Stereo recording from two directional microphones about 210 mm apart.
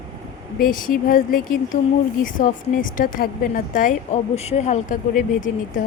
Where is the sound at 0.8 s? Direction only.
40° left (ahead or behind).